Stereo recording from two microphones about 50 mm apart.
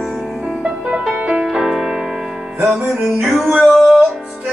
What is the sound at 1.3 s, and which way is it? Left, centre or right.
Music, centre.